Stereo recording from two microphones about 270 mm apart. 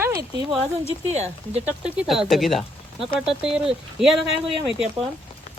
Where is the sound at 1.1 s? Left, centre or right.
Right.